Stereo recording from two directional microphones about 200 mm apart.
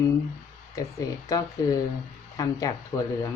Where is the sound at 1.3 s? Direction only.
15° left (ahead or behind).